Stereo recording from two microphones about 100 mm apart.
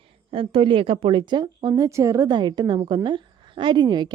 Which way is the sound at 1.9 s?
30° right (ahead or behind).